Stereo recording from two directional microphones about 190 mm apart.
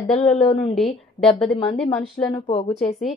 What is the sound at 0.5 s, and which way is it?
Speech, 25° left (ahead or behind).